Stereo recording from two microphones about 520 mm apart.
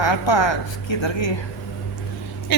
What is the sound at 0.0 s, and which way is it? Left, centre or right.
Speech, left.